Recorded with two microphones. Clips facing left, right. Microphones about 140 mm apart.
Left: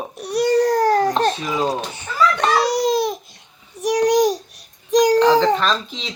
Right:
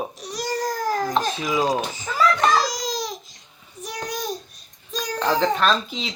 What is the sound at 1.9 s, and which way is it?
Crying, 65° left (ahead or behind).